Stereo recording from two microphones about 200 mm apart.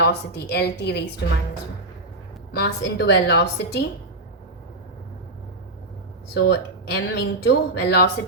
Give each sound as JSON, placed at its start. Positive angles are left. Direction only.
{"t": 0.0, "sound": "speech", "side_deg": 55}
{"t": 2.6, "sound": "speech", "side_deg": 55}
{"t": 6.3, "sound": "speech", "side_deg": 55}